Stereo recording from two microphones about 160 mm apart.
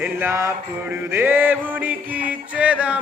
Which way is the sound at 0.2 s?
15° right (ahead or behind).